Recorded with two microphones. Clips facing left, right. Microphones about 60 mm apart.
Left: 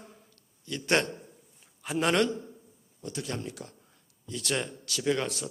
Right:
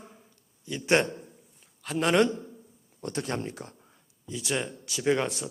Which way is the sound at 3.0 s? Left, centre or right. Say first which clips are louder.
Right 4 dB; right.